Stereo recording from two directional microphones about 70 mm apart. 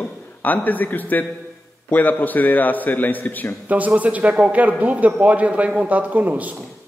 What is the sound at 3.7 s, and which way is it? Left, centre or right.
A man's voice, right.